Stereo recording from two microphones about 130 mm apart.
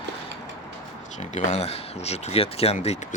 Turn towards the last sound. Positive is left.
turn(degrees=55)  # may be behind; listen again after turning